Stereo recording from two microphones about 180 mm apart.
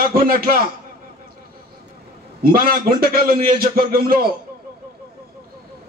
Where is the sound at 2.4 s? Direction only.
55° right (ahead or behind).